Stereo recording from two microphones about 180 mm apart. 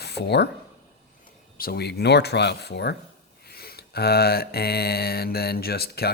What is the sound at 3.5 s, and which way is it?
Mantra, 60° left (ahead or behind).